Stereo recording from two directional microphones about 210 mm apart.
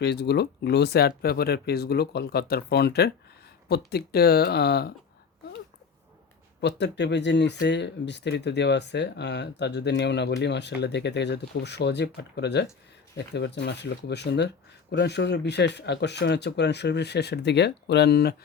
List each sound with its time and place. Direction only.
0.0 s speech: 50° left (ahead or behind)
6.6 s speech: 55° left (ahead or behind)